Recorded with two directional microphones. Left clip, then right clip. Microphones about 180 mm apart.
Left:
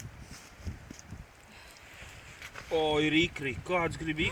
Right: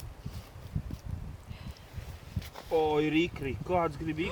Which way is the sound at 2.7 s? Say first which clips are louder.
Even; 50° left (ahead or behind).